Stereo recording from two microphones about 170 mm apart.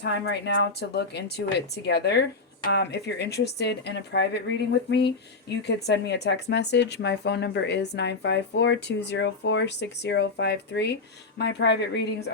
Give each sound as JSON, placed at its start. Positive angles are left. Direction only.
{"t": 0.0, "sound": "a woman's voice", "side_deg": 90}